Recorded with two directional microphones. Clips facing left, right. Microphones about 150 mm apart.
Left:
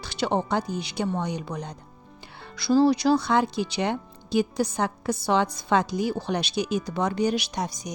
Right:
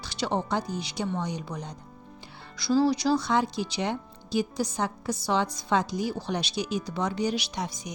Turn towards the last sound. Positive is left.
turn(degrees=40)  # may be behind; listen again after turning